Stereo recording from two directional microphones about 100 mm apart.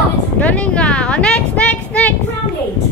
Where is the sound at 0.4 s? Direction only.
15° left (ahead or behind).